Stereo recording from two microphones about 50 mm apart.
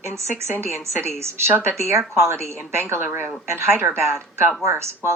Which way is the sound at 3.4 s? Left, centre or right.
Right.